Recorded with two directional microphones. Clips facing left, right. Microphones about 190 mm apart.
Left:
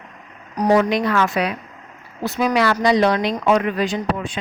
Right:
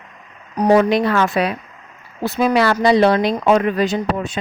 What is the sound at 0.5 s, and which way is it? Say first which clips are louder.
Speech: right 3 dB; 30° right (ahead or behind).